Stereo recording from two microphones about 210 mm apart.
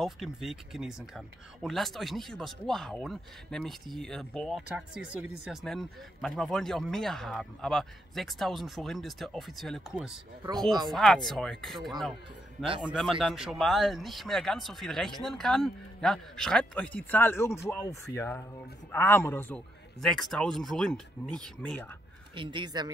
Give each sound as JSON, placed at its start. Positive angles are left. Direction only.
{"t": 0.0, "sound": "speech", "side_deg": 0}
{"t": 22.3, "sound": "speech", "side_deg": -25}